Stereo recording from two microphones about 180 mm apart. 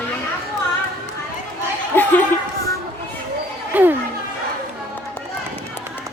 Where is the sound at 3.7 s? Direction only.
10° right (ahead or behind).